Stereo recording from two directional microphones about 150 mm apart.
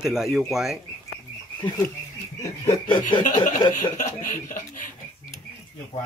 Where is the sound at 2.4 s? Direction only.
25° left (ahead or behind).